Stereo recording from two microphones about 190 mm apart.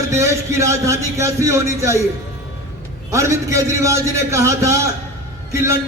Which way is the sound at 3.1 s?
15° right (ahead or behind).